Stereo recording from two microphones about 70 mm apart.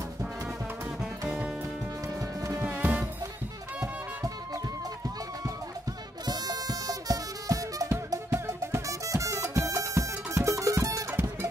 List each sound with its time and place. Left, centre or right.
2.1 s music: right
2.6 s music: right
6.2 s music: right
8.3 s music: right